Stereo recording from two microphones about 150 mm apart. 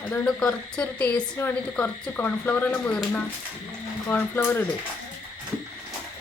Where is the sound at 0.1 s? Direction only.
10° left (ahead or behind).